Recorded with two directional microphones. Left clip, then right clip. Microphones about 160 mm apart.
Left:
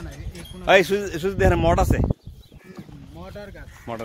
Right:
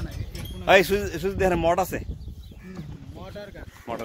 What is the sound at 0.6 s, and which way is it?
Speech, centre (ahead or behind).